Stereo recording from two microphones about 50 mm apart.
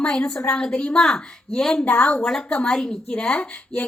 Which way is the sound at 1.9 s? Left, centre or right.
Left.